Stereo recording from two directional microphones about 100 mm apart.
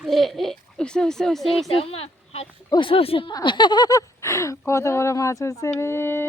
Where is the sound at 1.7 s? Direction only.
75° left (ahead or behind).